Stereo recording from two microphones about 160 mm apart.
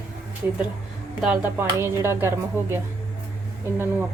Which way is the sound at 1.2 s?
10° right (ahead or behind).